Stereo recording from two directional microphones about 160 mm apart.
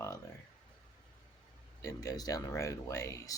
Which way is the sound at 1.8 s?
20° left (ahead or behind).